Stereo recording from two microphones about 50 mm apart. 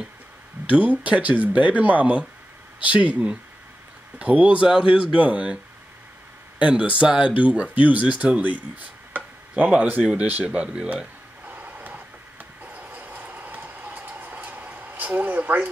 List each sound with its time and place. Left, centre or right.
0.7 s speech: right
6.6 s speech: right
11.4 s vehicle: right